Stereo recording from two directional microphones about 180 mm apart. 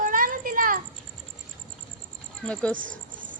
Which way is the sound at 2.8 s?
45° right (ahead or behind).